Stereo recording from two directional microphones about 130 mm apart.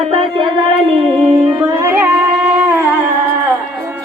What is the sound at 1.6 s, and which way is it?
Music, 20° right (ahead or behind).